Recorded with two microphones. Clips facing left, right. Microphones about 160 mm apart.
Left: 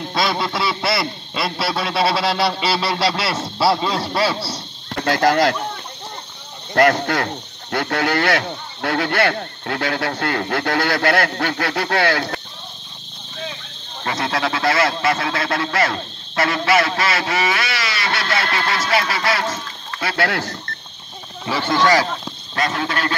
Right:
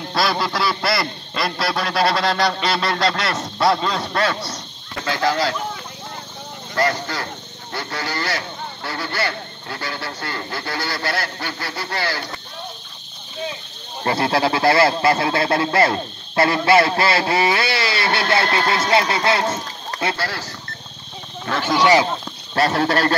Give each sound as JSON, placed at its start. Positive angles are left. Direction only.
{"t": 0.1, "sound": "a sound", "side_deg": 0}
{"t": 4.9, "sound": "speech", "side_deg": 50}
{"t": 6.7, "sound": "speech", "side_deg": 65}
{"t": 14.0, "sound": "speech", "side_deg": -30}
{"t": 20.2, "sound": "speech", "side_deg": 60}
{"t": 21.6, "sound": "speech", "side_deg": -15}
{"t": 22.6, "sound": "speech", "side_deg": -35}